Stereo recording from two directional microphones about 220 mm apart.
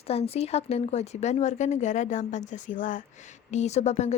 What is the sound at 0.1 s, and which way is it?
A woman's voice, 25° left (ahead or behind).